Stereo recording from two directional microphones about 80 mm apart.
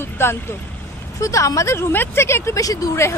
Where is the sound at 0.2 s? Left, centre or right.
Left.